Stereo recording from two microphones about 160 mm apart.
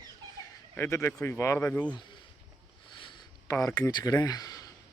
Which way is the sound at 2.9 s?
30° left (ahead or behind).